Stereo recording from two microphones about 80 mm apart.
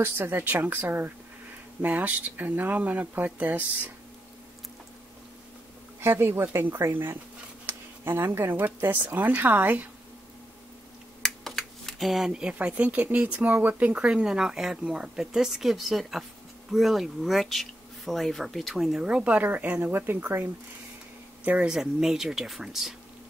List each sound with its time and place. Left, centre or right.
0.0 s speech: right
5.9 s speech: right
11.2 s speech: centre; by 20.4 s right
21.5 s speech: centre
21.7 s speech: centre